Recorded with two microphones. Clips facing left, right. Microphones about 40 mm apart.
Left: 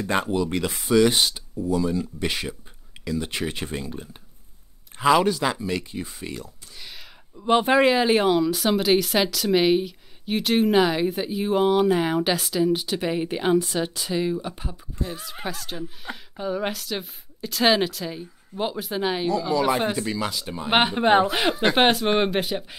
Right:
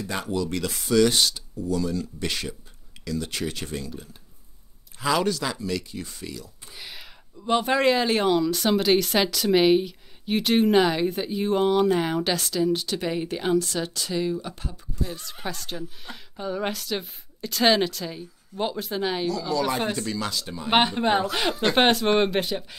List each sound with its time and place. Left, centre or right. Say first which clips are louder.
0.0 s speech: left 5 dB; left
0.4 s speech: left 3 dB; left
6.2 s speech: left 3 dB; left
6.8 s a sound: right 1 dB; centre
7.3 s speech: left 4 dB; centre
15.4 s speech: left 1 dB; centre
19.2 s speech: left 3 dB; centre